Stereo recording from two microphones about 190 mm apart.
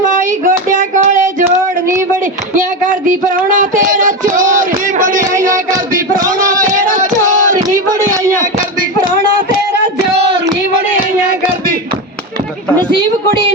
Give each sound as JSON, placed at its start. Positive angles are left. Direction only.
{"t": 0.1, "sound": "a sound", "side_deg": -45}
{"t": 2.6, "sound": "music", "side_deg": -45}
{"t": 6.7, "sound": "child singing", "side_deg": -40}